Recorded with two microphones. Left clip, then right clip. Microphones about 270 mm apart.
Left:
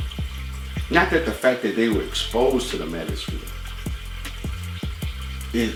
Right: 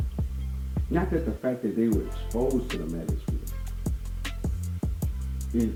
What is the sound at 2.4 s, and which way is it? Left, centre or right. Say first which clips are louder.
Speech: left 7 dB; left.